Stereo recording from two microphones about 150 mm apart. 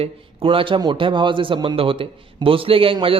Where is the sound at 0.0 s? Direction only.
35° right (ahead or behind).